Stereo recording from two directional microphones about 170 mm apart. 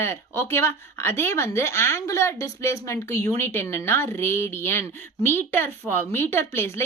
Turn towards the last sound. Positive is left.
turn(degrees=15)  # may be behind; listen again after turning